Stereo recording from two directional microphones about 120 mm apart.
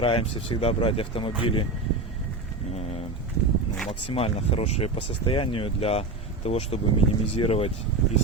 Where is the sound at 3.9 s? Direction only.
50° left (ahead or behind).